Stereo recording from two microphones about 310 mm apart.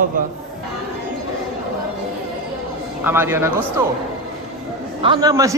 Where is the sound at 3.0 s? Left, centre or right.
Centre.